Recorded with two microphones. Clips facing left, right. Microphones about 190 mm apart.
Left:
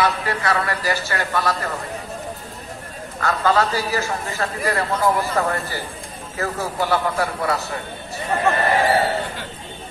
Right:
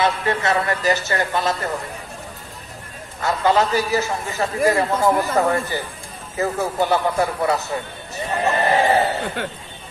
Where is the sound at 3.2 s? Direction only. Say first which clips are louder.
Right 1 dB; 20° right (ahead or behind).